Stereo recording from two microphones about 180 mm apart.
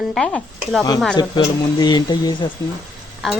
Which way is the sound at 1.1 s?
25° left (ahead or behind).